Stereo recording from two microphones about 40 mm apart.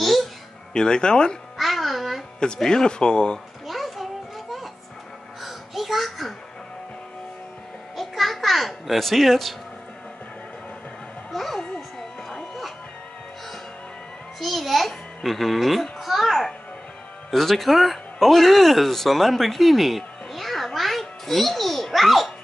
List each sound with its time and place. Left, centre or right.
0.0 s babbling: centre
0.7 s speech: centre
1.6 s music: centre
2.6 s speech: centre
3.6 s music: centre
5.4 s a sound: centre
7.9 s babbling: centre
11.3 s a sound: centre
12.0 s a sound: centre
14.4 s music: centre
17.3 s speech: centre